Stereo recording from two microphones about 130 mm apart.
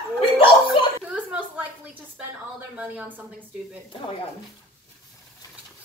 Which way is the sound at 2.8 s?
10° right (ahead or behind).